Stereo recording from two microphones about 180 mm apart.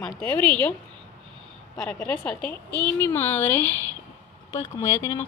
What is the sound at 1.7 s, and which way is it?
Speech, 5° left (ahead or behind).